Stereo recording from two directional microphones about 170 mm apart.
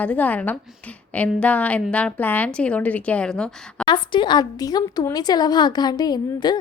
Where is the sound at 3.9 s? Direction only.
25° left (ahead or behind).